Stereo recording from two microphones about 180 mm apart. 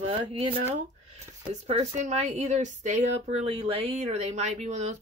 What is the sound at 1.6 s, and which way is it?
Speech, 40° right (ahead or behind).